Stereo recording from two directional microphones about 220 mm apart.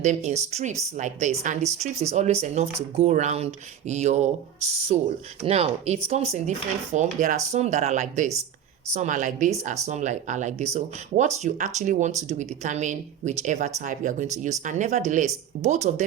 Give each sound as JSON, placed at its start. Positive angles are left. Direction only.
{"t": 0.0, "sound": "speech", "side_deg": -35}